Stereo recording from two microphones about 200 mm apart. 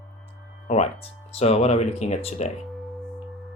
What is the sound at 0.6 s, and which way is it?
Speech, 35° left (ahead or behind).